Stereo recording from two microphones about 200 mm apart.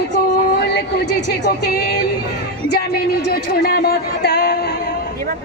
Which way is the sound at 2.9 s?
50° left (ahead or behind).